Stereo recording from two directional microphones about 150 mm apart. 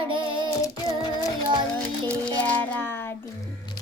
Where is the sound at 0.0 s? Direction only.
35° right (ahead or behind).